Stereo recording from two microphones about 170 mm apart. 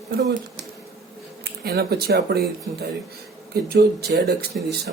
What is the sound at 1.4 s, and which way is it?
Speech, 65° right (ahead or behind).